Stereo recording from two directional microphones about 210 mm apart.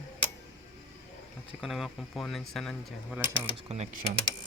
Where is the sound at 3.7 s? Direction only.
30° right (ahead or behind).